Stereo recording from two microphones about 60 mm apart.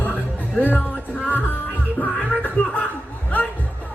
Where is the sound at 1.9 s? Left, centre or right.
Left.